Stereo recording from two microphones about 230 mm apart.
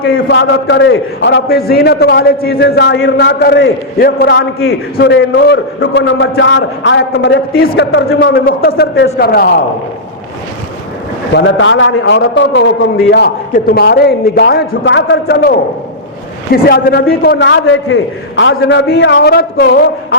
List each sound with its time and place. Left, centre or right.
0.0 s a man's voice: left
11.3 s a man's voice: left